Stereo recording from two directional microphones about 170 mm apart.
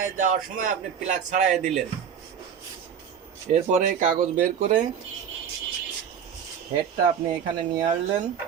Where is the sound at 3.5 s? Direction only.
45° right (ahead or behind).